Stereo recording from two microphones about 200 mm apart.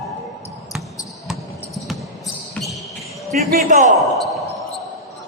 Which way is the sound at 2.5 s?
Centre (ahead or behind).